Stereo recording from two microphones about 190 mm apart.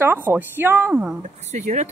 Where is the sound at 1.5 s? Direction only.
40° right (ahead or behind).